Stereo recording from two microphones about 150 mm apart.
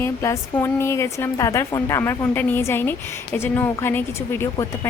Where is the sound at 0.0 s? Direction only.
20° left (ahead or behind).